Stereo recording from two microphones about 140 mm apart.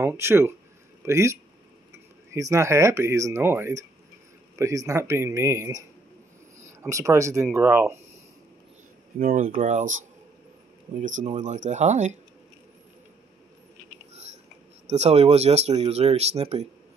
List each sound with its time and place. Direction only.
0.0 s speech: 20° right (ahead or behind)
9.2 s speech: 75° right (ahead or behind)
9.6 s speech: 60° right (ahead or behind)
14.1 s a sound: 50° right (ahead or behind)
14.9 s speech: 50° right (ahead or behind)